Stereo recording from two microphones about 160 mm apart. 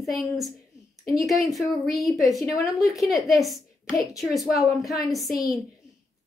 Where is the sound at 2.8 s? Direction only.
Centre (ahead or behind).